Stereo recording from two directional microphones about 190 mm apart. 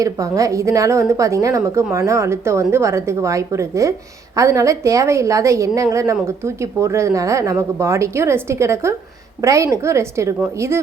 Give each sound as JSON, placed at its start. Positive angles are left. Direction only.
{"t": 0.0, "sound": "a woman's voice", "side_deg": -15}